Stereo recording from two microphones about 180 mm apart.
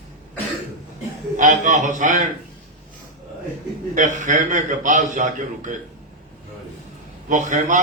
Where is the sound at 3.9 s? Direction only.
45° right (ahead or behind).